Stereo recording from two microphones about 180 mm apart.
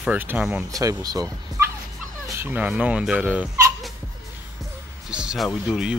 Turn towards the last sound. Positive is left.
turn(degrees=-5)  # may be behind; listen again after turning